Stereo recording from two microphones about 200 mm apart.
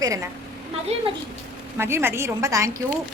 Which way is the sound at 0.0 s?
15° right (ahead or behind).